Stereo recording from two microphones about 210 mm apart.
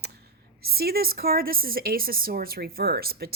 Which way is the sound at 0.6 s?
45° right (ahead or behind).